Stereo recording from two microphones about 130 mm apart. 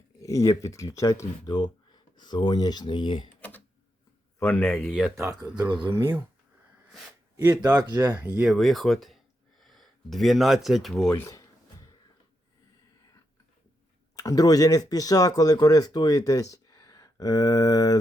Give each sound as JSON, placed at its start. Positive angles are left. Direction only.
{"t": 0.2, "sound": "speech", "side_deg": 25}
{"t": 4.4, "sound": "a man's voice", "side_deg": 15}
{"t": 5.1, "sound": "speech", "side_deg": -25}
{"t": 7.9, "sound": "speech", "side_deg": -25}
{"t": 8.2, "sound": "speech", "side_deg": -10}
{"t": 8.4, "sound": "speech", "side_deg": 0}
{"t": 11.2, "sound": "speech", "side_deg": 25}
{"t": 14.2, "sound": "speech", "side_deg": 30}